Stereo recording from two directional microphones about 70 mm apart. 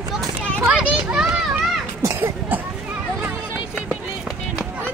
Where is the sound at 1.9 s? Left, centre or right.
Right.